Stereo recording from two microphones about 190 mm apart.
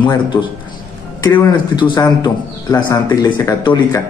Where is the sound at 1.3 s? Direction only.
20° left (ahead or behind).